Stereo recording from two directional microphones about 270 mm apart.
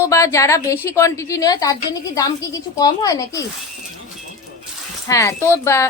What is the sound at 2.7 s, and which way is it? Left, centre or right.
Speech, centre.